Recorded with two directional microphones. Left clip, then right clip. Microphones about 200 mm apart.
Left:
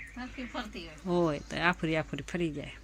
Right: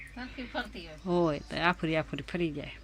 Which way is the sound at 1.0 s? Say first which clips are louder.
Right 1 dB; centre (ahead or behind).